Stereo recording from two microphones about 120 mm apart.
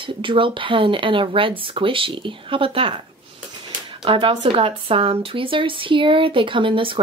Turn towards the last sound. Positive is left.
turn(degrees=-45)  # may be behind; listen again after turning